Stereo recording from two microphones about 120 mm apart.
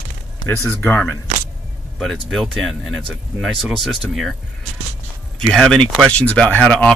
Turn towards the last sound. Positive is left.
turn(degrees=10)  # may be behind; listen again after turning